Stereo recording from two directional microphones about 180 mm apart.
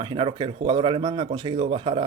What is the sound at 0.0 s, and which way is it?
Speech, 30° right (ahead or behind).